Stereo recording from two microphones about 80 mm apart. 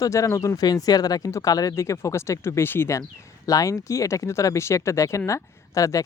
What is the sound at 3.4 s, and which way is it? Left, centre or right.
Speech, left.